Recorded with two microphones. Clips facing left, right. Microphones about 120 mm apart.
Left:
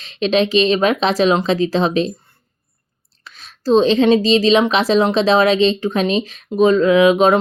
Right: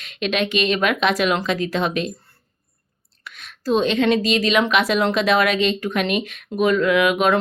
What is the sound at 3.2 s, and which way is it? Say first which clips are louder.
Speech: left 4 dB; 30° left (ahead or behind).